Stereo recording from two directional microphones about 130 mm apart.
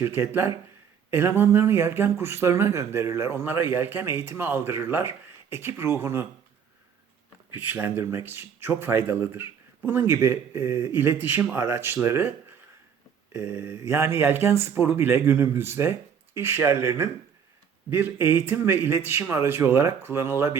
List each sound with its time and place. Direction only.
0.0 s speech: 15° right (ahead or behind)
7.5 s speech: 15° right (ahead or behind)
13.3 s speech: 15° right (ahead or behind)